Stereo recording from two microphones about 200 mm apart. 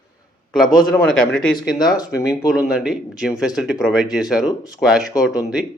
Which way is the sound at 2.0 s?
20° left (ahead or behind).